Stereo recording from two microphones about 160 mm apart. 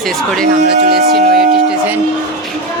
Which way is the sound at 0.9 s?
75° right (ahead or behind).